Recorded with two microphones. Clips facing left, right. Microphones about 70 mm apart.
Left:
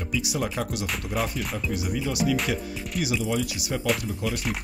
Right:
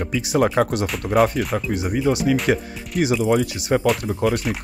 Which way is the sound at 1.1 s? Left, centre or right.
Right.